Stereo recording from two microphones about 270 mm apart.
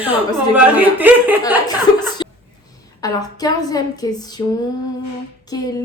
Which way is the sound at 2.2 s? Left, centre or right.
Centre.